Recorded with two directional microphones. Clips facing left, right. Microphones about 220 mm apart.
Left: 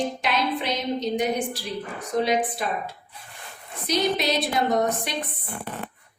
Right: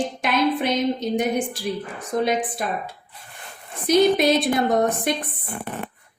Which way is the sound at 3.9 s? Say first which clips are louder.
Right 7 dB; 50° right (ahead or behind).